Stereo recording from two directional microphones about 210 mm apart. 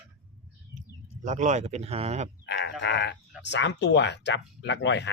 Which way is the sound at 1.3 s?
35° right (ahead or behind).